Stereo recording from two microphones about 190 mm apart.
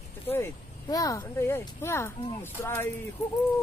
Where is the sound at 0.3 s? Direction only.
15° left (ahead or behind).